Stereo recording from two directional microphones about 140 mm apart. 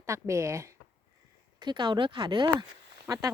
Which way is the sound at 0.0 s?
20° right (ahead or behind).